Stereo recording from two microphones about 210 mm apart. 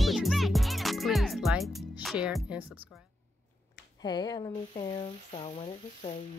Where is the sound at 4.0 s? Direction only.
20° left (ahead or behind).